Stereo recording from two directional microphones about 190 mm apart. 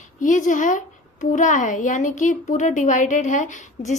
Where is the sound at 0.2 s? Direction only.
40° left (ahead or behind).